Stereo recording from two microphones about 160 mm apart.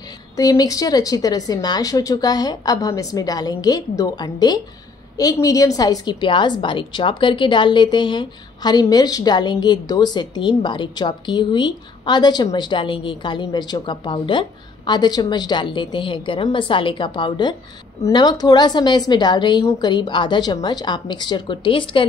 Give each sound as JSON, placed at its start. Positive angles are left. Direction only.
{"t": 0.4, "sound": "a woman's voice", "side_deg": 20}